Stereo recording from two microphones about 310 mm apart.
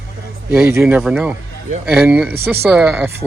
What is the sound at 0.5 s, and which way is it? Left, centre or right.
Speech, centre.